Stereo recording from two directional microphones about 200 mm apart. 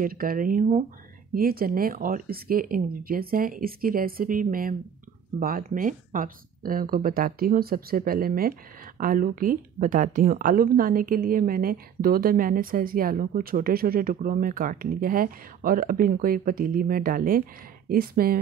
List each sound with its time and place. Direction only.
0.0 s speech: 45° right (ahead or behind)